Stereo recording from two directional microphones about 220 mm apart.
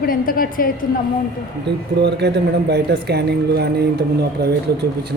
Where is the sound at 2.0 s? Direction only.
50° right (ahead or behind).